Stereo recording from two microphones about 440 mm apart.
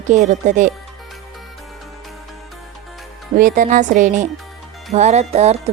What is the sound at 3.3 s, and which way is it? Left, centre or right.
Speech, centre.